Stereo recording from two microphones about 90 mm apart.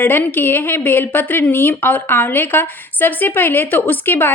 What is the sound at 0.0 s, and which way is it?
A woman's voice, 20° left (ahead or behind).